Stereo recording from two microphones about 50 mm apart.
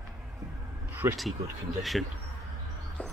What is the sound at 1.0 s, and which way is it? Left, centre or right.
Speech, right.